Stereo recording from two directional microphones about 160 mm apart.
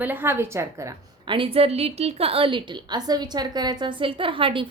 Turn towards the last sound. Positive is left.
turn(degrees=-35)  # may be behind; listen again after turning